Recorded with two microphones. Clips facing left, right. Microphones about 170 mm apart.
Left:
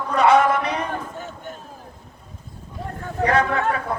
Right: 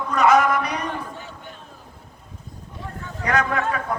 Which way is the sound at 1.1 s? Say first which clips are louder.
Left 4 dB; 45° left (ahead or behind).